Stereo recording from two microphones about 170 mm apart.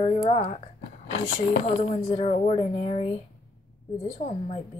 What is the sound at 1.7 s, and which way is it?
Speech, 35° left (ahead or behind).